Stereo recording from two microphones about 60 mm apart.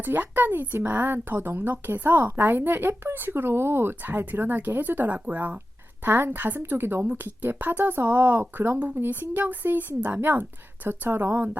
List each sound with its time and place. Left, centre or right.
0.0 s speech: right
6.0 s speech: right